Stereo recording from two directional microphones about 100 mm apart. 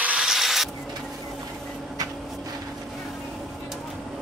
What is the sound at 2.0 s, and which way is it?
Vehicle, 35° right (ahead or behind).